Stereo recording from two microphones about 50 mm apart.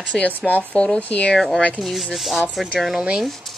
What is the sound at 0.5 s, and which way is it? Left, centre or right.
Speech, left.